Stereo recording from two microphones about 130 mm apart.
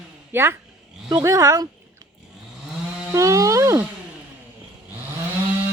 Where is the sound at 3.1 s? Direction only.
25° right (ahead or behind).